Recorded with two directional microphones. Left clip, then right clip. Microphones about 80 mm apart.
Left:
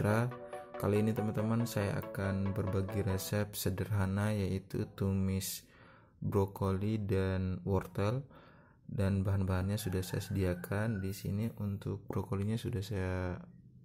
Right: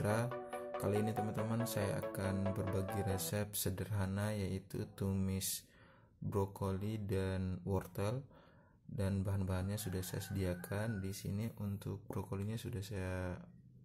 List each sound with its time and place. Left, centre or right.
0.0 s speech: left
4.9 s speech: left
6.3 s speech: left
11.0 s speech: left
12.4 s speech: left